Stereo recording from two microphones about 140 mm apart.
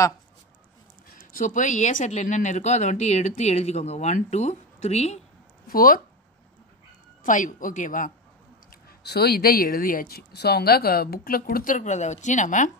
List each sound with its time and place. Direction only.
1.1 s speech: 75° left (ahead or behind); by 5.2 s 50° left (ahead or behind)
5.7 s speech: 90° left
7.2 s a woman's voice: 70° left (ahead or behind)
9.3 s speech: 90° left; by 12.7 s 65° left (ahead or behind)